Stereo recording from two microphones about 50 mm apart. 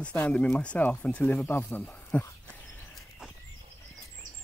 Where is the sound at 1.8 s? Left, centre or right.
Left.